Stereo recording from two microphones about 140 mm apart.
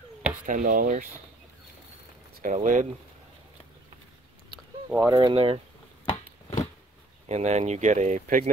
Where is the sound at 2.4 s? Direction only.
70° right (ahead or behind).